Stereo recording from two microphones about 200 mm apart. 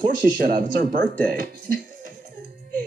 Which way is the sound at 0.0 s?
45° right (ahead or behind).